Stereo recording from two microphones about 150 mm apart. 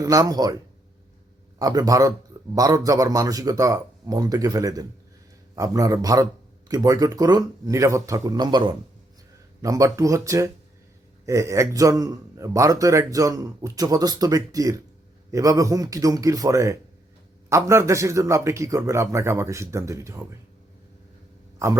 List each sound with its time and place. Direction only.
0.0 s a man's voice: 25° right (ahead or behind)
1.5 s a man's voice: 25° right (ahead or behind)